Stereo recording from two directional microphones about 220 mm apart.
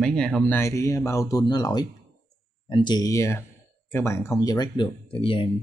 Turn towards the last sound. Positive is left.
turn(degrees=25)  # may be behind; listen again after turning